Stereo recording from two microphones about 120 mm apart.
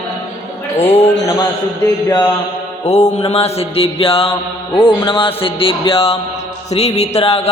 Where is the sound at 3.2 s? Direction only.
55° left (ahead or behind).